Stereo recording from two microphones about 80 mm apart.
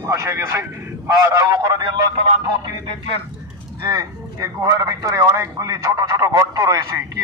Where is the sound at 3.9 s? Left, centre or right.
Right.